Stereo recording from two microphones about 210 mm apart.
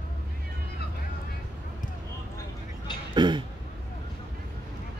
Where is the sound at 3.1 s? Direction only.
20° right (ahead or behind).